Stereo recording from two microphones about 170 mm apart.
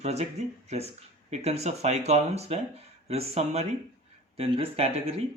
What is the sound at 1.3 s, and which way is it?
Speech, 40° right (ahead or behind).